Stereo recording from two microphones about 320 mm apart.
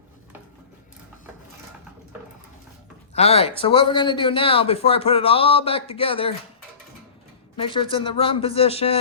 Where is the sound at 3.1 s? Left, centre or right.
Centre.